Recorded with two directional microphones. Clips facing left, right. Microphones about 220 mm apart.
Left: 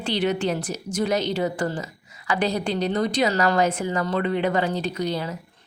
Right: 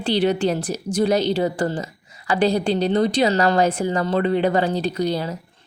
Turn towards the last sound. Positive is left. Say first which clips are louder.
# right 4 dB
turn(degrees=-35)  # may be behind; listen again after turning